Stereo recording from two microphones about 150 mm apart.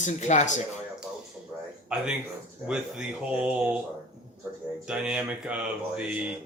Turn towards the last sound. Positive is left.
turn(degrees=-10)  # may be behind; listen again after turning